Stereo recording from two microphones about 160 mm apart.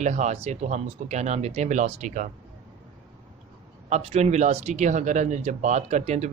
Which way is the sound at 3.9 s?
45° right (ahead or behind).